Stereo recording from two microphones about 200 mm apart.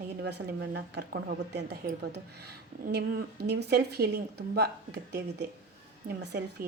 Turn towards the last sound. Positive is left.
turn(degrees=-55)  # may be behind; listen again after turning